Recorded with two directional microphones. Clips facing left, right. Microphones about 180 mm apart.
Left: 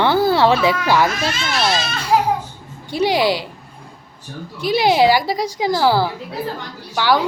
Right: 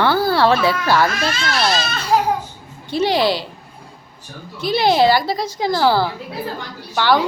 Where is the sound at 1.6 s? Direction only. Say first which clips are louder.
Even; 10° left (ahead or behind).